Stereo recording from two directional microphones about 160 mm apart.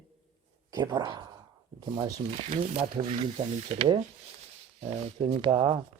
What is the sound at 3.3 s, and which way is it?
Speech, 40° right (ahead or behind).